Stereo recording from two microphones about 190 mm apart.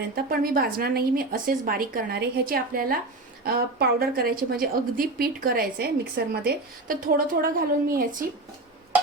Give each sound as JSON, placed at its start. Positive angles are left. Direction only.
{"t": 0.3, "sound": "a woman's voice", "side_deg": -50}